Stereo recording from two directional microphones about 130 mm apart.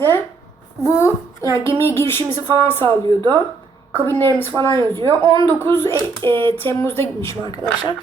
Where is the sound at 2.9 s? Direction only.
40° right (ahead or behind).